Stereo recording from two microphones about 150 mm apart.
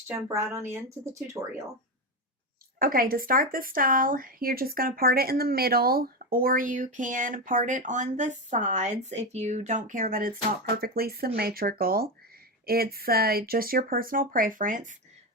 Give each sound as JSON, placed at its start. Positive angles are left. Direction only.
{"t": 0.3, "sound": "speech", "side_deg": -20}
{"t": 2.7, "sound": "speech", "side_deg": -70}
{"t": 10.8, "sound": "speech", "side_deg": -85}